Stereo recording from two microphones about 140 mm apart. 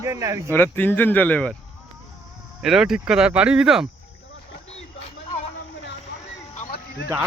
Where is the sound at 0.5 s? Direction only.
15° left (ahead or behind).